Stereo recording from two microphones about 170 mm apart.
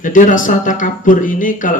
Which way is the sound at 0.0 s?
50° left (ahead or behind).